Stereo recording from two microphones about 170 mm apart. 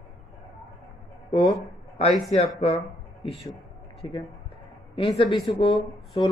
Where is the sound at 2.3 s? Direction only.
35° left (ahead or behind).